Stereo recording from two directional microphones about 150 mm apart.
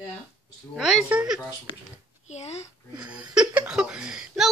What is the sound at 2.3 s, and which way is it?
Speech, 50° left (ahead or behind).